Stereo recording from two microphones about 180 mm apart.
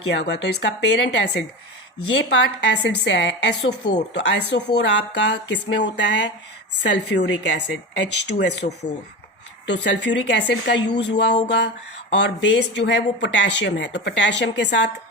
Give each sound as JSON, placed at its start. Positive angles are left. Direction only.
{"t": 0.1, "sound": "speech", "side_deg": 80}